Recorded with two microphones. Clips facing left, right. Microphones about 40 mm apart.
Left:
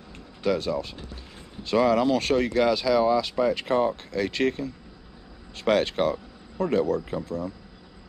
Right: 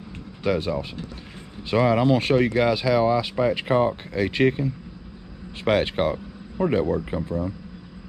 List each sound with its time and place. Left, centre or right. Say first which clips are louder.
0.4 s speech: right 1 dB; centre